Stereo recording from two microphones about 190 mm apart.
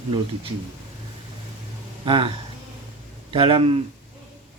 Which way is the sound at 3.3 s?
25° right (ahead or behind).